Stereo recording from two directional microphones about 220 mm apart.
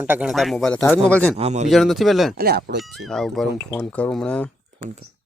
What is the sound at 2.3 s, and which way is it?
Speech, 45° right (ahead or behind).